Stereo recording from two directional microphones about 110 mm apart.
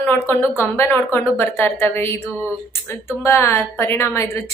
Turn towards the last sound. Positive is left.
turn(degrees=25)  # may be behind; listen again after turning